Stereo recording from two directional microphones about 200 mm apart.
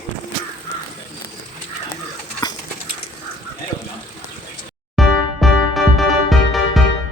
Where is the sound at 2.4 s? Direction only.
20° left (ahead or behind).